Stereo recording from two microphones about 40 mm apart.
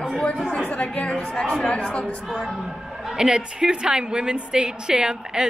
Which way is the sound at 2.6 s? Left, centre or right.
Centre.